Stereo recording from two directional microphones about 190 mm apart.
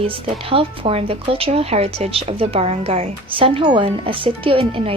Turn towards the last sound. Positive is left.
turn(degrees=-30)  # may be behind; listen again after turning